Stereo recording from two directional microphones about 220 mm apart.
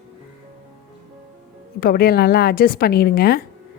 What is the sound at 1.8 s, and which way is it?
A woman's voice, 45° left (ahead or behind).